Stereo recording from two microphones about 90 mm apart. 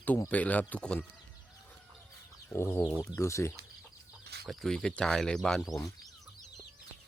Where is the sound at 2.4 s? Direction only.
30° left (ahead or behind).